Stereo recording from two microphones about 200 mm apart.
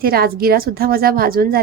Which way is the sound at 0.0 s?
50° right (ahead or behind).